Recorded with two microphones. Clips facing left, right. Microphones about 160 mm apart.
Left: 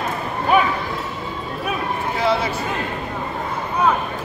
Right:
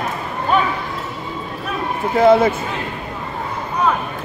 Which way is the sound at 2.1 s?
50° right (ahead or behind).